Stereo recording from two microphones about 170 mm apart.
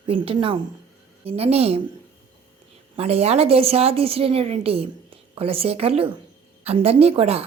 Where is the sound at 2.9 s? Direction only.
35° right (ahead or behind).